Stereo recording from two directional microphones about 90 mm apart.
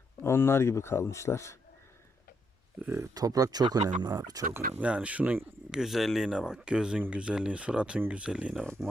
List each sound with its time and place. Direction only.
0.2 s speech: 25° left (ahead or behind)
3.2 s speech: 40° right (ahead or behind)
4.5 s speech: 15° right (ahead or behind)
5.7 s speech: 5° right (ahead or behind)